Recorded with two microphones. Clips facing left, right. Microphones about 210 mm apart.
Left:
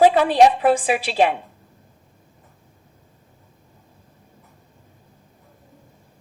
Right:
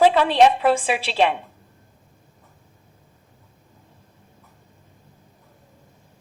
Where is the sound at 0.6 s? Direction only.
45° left (ahead or behind).